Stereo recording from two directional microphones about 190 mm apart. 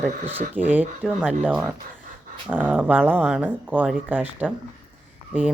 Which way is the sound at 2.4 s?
10° right (ahead or behind).